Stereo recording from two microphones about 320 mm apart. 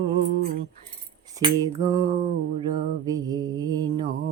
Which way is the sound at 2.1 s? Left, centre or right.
Right.